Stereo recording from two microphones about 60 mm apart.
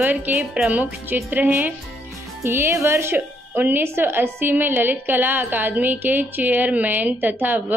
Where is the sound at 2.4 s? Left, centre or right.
Right.